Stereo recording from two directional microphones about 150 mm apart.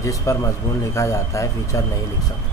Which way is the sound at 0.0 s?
20° left (ahead or behind).